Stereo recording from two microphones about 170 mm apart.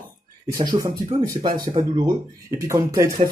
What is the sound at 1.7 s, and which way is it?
Speech, 30° right (ahead or behind).